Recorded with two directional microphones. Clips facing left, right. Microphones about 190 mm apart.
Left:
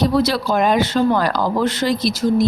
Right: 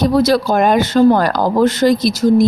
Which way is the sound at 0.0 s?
45° right (ahead or behind).